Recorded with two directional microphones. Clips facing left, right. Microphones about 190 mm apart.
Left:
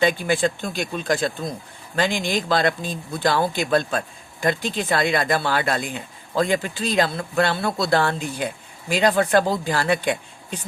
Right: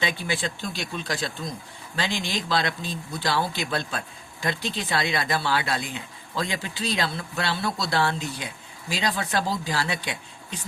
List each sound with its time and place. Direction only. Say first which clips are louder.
0.0 s speech: left 8 dB; 50° left (ahead or behind)